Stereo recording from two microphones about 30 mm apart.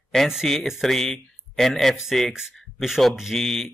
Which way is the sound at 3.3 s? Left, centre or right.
Centre.